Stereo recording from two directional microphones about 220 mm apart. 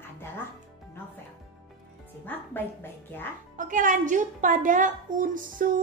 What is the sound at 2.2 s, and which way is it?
A woman's voice, 10° left (ahead or behind).